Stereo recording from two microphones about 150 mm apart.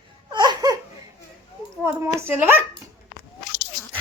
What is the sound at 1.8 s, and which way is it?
Speech, 15° right (ahead or behind).